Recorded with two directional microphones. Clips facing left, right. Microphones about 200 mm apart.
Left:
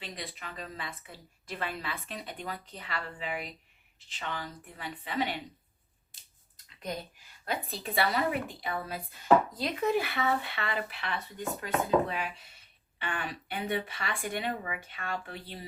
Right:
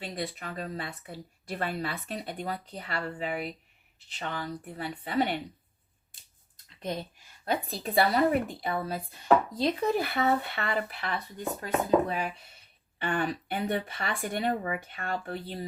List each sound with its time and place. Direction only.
0.0 s a woman's voice: 45° right (ahead or behind)
7.4 s speech: 35° right (ahead or behind)
9.6 s speech: 25° right (ahead or behind)
9.9 s a woman's voice: 40° right (ahead or behind)